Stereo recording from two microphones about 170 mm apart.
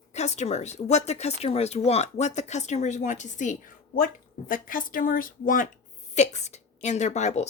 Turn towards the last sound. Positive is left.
turn(degrees=40)  # may be behind; listen again after turning